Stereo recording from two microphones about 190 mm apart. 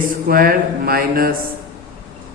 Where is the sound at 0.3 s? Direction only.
50° right (ahead or behind).